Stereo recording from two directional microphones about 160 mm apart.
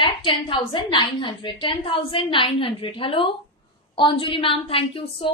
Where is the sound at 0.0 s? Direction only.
35° left (ahead or behind).